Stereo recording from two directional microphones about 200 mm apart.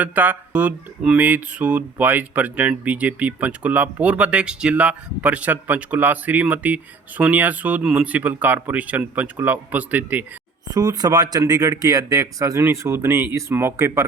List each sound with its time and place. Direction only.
0.0 s speech: 10° right (ahead or behind)
10.7 s speech: 20° right (ahead or behind)